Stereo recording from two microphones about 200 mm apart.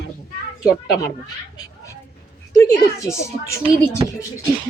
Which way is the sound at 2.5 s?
15° left (ahead or behind).